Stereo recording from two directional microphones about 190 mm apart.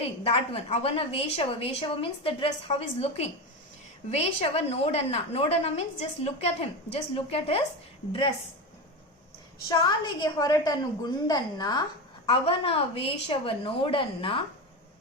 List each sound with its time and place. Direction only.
0.0 s a woman's voice: 30° left (ahead or behind)
9.6 s a woman's voice: 20° left (ahead or behind)